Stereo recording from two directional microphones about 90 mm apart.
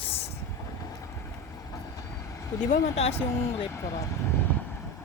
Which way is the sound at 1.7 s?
40° left (ahead or behind).